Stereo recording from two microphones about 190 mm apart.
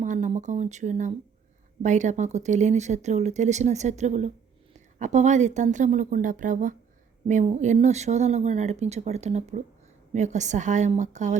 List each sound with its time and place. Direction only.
0.0 s speech: 40° right (ahead or behind)